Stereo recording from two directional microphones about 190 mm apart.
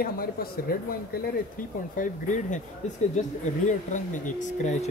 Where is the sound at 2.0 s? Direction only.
40° left (ahead or behind).